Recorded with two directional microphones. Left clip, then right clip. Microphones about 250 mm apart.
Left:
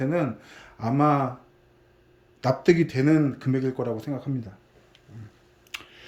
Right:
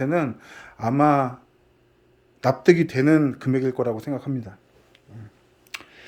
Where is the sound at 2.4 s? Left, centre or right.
Centre.